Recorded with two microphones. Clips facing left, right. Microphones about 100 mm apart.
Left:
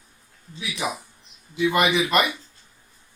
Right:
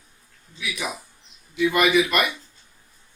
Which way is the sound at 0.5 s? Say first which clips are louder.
Left 2 dB; 30° left (ahead or behind).